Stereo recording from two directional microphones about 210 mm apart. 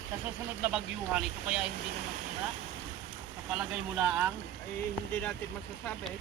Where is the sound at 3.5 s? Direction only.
5° right (ahead or behind).